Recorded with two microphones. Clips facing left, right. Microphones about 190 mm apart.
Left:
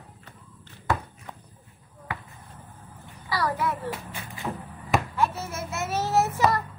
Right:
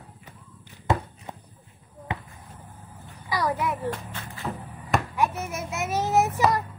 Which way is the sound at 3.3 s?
20° right (ahead or behind).